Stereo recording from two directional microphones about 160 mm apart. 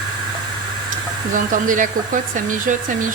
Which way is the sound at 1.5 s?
55° right (ahead or behind).